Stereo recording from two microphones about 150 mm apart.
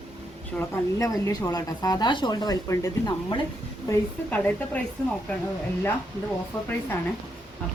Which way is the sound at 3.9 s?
10° left (ahead or behind).